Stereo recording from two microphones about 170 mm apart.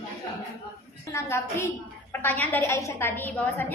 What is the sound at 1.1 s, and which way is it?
A woman's voice, 15° left (ahead or behind).